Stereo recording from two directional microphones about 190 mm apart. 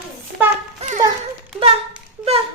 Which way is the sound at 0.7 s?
40° right (ahead or behind).